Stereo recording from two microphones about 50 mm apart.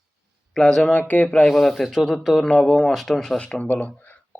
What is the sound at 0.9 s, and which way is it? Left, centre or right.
Speech, left.